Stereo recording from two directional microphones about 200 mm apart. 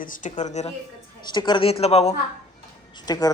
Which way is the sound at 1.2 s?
20° left (ahead or behind).